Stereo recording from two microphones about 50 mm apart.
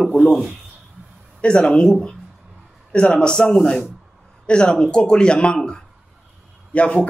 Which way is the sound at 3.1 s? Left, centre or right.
Centre.